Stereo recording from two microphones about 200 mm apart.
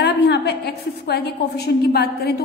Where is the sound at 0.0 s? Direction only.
55° left (ahead or behind).